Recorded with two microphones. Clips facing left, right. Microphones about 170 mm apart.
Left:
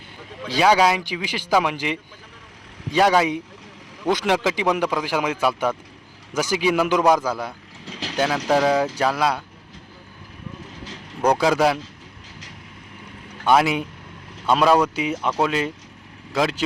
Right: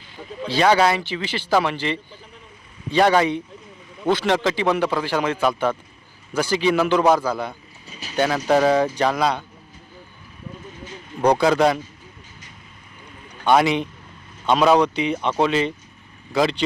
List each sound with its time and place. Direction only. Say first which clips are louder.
0.4 s a man's voice: even; 10° left (ahead or behind)
7.0 s speech: even; 5° right (ahead or behind)
7.3 s a man's voice: right 1 dB; 5° left (ahead or behind)
7.9 s vehicle: left 7 dB; 90° left
8.4 s speech: right 2 dB; centre (ahead or behind)
11.3 s speech: right 1 dB; 5° left (ahead or behind)
13.4 s speech: right 1 dB; 5° left (ahead or behind)